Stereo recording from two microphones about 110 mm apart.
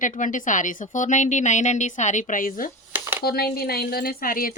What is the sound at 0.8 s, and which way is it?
A woman's voice, 90° left.